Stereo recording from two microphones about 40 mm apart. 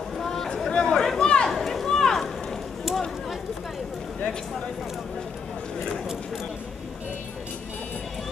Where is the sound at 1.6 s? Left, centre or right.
Centre.